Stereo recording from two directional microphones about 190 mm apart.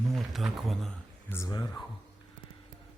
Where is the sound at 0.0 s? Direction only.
Centre (ahead or behind).